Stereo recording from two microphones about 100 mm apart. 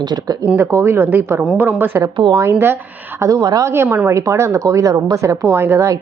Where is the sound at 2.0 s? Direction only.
50° right (ahead or behind).